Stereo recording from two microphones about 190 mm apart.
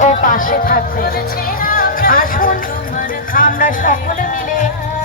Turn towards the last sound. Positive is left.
turn(degrees=45)  # may be behind; listen again after turning